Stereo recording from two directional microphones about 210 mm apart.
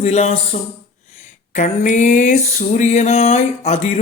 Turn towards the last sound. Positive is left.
turn(degrees=30)  # may be behind; listen again after turning